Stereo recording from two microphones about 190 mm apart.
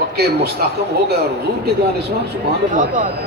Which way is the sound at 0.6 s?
55° right (ahead or behind).